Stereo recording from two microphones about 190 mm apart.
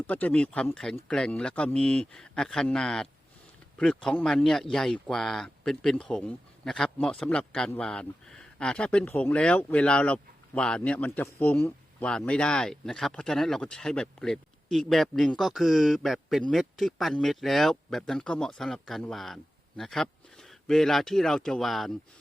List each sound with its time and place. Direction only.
0.1 s speech: 10° left (ahead or behind)